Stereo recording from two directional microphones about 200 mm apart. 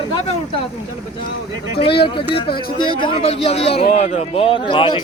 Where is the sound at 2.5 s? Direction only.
50° left (ahead or behind).